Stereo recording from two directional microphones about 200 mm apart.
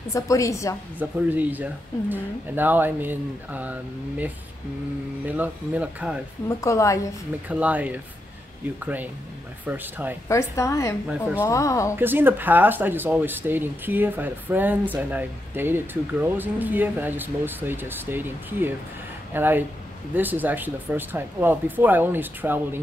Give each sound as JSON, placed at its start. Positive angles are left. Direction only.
{"t": 0.1, "sound": "a woman's voice", "side_deg": 15}
{"t": 0.9, "sound": "speech", "side_deg": -10}
{"t": 5.2, "sound": "speech", "side_deg": -10}
{"t": 6.6, "sound": "a woman's voice", "side_deg": 15}
{"t": 7.4, "sound": "speech", "side_deg": -5}
{"t": 10.2, "sound": "a woman's voice", "side_deg": 15}
{"t": 11.1, "sound": "a woman's voice", "side_deg": -5}
{"t": 11.4, "sound": "a woman's voice", "side_deg": 15}
{"t": 12.0, "sound": "speech", "side_deg": -10}